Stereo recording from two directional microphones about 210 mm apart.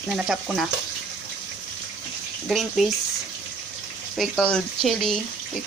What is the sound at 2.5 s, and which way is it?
Speech, centre (ahead or behind).